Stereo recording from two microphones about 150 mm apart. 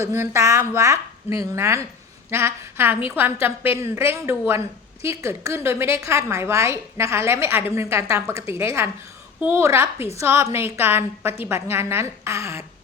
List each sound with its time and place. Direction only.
0.0 s a woman's voice: 15° right (ahead or behind)